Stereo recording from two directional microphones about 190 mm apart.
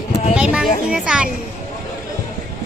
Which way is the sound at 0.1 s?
35° left (ahead or behind).